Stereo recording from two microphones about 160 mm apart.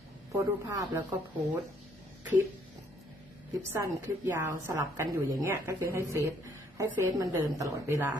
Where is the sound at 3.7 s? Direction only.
15° right (ahead or behind).